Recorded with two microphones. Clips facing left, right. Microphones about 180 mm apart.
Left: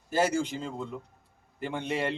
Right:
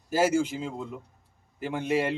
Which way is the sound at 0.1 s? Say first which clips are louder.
Right 3 dB; 5° right (ahead or behind).